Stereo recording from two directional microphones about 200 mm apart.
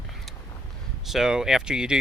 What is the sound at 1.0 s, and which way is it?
Speech, centre (ahead or behind).